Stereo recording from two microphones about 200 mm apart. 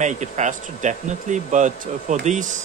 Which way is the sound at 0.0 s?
35° right (ahead or behind).